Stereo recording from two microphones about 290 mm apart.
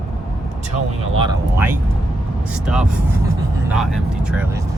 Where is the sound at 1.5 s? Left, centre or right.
Centre.